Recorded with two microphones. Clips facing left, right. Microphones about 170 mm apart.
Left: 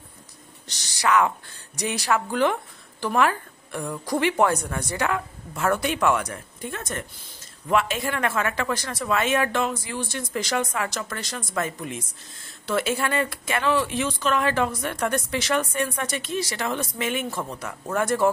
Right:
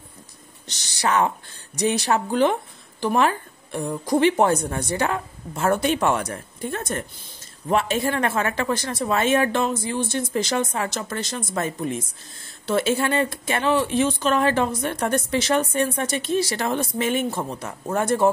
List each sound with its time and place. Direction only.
0.7 s speech: 25° right (ahead or behind)